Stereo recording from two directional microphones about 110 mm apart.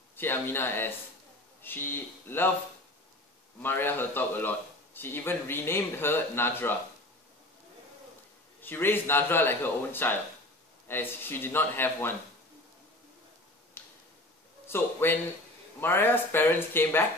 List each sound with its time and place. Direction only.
0.1 s speech: 20° left (ahead or behind)
3.6 s speech: 20° left (ahead or behind)
8.5 s speech: 20° left (ahead or behind)
13.8 s tick-tock: 20° left (ahead or behind)
14.7 s speech: 20° left (ahead or behind)